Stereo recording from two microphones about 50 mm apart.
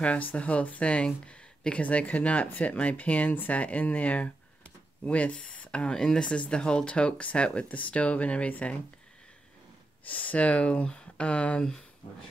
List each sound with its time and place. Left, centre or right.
0.0 s speech: left
10.0 s speech: left